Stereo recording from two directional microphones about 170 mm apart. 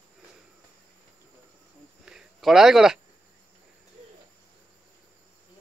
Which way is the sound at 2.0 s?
5° right (ahead or behind).